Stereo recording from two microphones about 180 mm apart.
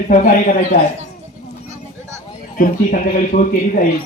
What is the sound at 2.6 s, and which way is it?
A man's voice, 45° left (ahead or behind).